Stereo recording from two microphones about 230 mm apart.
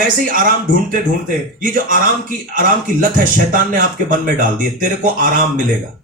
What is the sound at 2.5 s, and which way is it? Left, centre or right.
Speech, right.